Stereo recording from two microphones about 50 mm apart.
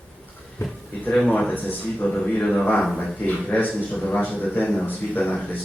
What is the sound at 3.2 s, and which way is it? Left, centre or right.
Speech, left.